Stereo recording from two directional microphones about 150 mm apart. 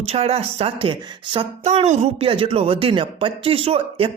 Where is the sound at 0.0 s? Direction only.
45° right (ahead or behind).